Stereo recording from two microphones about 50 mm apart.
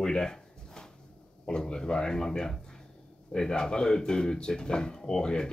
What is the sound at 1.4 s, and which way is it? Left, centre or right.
Speech, centre.